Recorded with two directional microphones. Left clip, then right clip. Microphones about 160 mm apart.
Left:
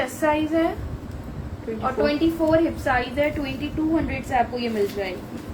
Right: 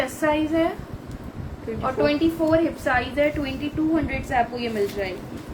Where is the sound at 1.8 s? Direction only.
30° right (ahead or behind).